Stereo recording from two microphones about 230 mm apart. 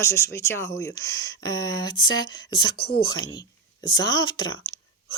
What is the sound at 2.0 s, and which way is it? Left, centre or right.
Speech, left.